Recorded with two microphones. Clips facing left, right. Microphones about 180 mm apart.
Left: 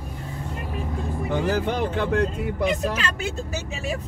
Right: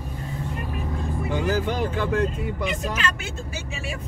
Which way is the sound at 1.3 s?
60° left (ahead or behind).